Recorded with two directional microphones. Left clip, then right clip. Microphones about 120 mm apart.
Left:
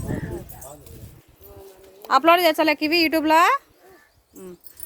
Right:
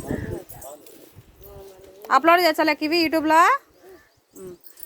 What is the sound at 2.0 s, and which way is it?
A woman's voice, 15° left (ahead or behind).